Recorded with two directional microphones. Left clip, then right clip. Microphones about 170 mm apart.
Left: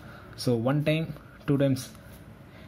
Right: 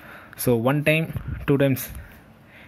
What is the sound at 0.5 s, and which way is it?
Speech, 10° right (ahead or behind).